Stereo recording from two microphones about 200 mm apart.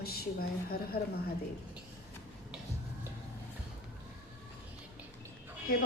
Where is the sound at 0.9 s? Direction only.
50° left (ahead or behind).